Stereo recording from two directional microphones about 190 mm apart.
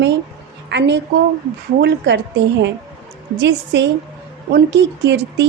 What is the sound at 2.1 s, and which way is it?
Speech, 65° right (ahead or behind).